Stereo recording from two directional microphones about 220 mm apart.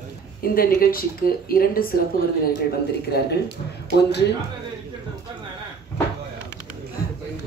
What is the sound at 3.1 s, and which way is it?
Speech, 45° left (ahead or behind).